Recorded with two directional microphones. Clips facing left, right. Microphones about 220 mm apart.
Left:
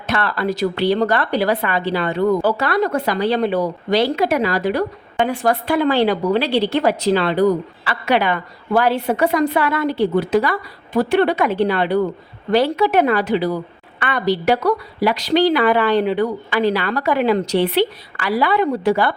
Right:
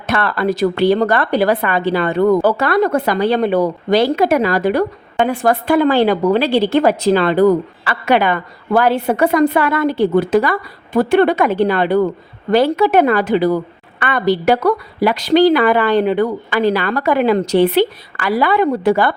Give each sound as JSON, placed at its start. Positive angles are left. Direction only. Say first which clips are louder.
{"t": 0.1, "sound": "a woman's voice", "louder": "right 3 dB", "side_deg": -55}